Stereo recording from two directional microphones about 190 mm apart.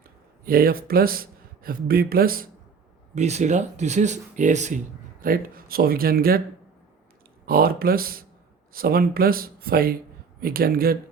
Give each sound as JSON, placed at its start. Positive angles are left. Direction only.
{"t": 0.4, "sound": "speech", "side_deg": -50}
{"t": 3.2, "sound": "speech", "side_deg": -35}
{"t": 5.2, "sound": "speech", "side_deg": -50}
{"t": 7.4, "sound": "speech", "side_deg": -50}